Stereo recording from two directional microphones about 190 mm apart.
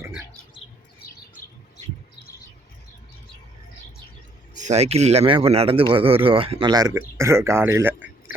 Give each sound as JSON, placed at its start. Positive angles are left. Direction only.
{"t": 4.5, "sound": "speech", "side_deg": -40}